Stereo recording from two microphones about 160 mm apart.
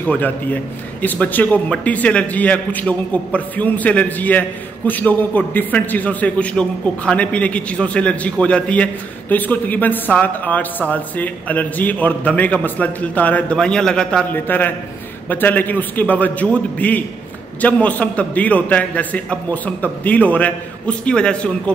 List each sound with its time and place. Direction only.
0.0 s a man's voice: 10° left (ahead or behind)